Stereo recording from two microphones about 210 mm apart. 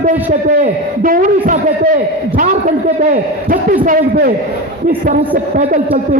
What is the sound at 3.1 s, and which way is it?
A man's voice, 40° right (ahead or behind).